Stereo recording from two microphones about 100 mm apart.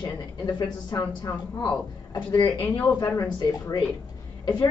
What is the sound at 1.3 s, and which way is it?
Speech, 30° left (ahead or behind).